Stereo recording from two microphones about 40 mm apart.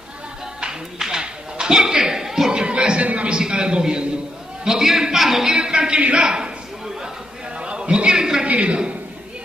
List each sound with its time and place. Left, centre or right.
0.6 s music: centre
1.2 s a sound: centre
2.5 s a sound: right
3.3 s a man's voice: right
4.6 s a man's voice: centre
5.6 s a man's voice: right
6.2 s a man's voice: right
7.5 s a sound: right
8.5 s a man's voice: right